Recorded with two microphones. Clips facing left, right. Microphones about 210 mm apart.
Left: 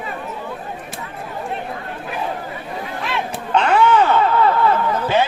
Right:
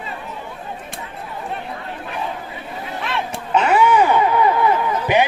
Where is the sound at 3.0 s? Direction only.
Centre (ahead or behind).